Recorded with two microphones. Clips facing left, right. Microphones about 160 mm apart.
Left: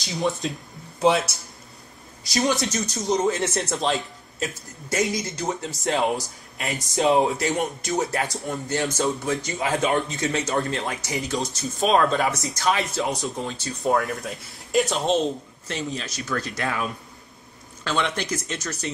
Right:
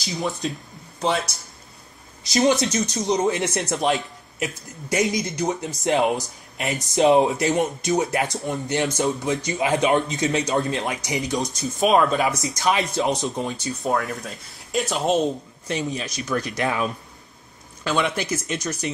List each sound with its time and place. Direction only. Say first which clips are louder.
0.0 s speech: left 1 dB; centre (ahead or behind)
2.2 s speech: right 4 dB; 20° right (ahead or behind)
2.8 s speech: right 4 dB; centre (ahead or behind)
3.1 s speech: even; 20° right (ahead or behind)
12.5 s speech: right 2 dB; 20° right (ahead or behind)
13.7 s speech: left 3 dB; centre (ahead or behind)
15.6 s speech: right 4 dB; 15° right (ahead or behind)
17.8 s speech: right 2 dB; 10° right (ahead or behind)